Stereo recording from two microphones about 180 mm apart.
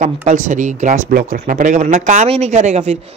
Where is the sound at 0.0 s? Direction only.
45° right (ahead or behind).